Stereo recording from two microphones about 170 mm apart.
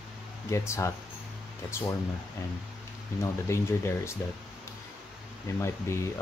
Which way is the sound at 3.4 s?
15° left (ahead or behind).